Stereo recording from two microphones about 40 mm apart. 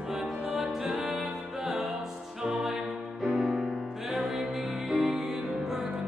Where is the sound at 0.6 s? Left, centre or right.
Centre.